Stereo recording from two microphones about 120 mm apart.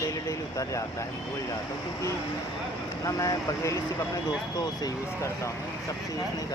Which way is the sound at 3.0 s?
25° left (ahead or behind).